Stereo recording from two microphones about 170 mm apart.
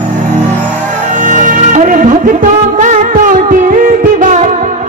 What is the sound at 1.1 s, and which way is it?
Music, 50° right (ahead or behind).